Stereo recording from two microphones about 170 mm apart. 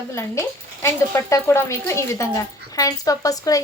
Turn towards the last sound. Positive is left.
turn(degrees=20)  # may be behind; listen again after turning